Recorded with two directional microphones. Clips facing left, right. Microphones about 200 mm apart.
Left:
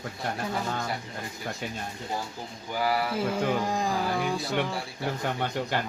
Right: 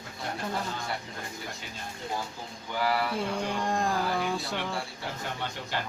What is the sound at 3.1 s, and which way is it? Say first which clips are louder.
Speech: left 4 dB; 5° left (ahead or behind).